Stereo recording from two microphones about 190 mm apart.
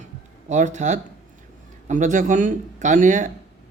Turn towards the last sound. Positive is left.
turn(degrees=-45)  # may be behind; listen again after turning